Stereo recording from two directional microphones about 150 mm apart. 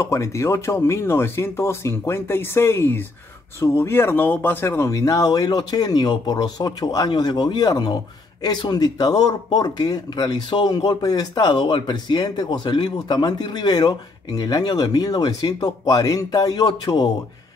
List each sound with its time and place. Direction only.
0.0 s speech: 20° left (ahead or behind)